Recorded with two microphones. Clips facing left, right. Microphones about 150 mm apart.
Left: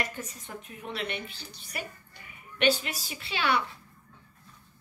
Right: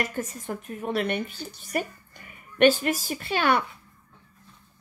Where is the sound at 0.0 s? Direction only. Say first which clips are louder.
Right 6 dB; 45° right (ahead or behind).